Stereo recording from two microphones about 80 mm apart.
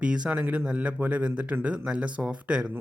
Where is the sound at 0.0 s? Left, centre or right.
Centre.